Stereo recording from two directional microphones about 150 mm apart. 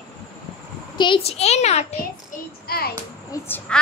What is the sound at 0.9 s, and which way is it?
Speech, 30° left (ahead or behind).